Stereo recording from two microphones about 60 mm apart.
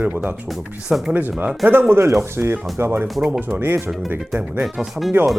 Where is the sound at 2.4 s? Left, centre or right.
Right.